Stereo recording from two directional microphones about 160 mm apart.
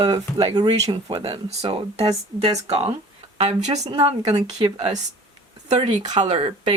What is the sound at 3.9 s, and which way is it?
Speech, 30° right (ahead or behind).